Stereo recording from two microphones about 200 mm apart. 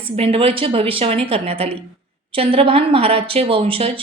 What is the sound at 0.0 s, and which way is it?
Speech, 30° right (ahead or behind).